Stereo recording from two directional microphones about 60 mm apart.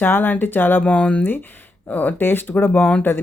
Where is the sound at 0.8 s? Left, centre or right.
Left.